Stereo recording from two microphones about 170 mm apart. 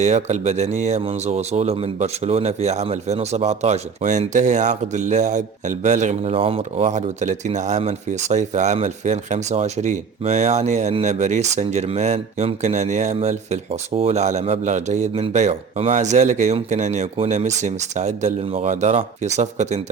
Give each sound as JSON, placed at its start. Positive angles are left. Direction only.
{"t": 0.0, "sound": "speech", "side_deg": -40}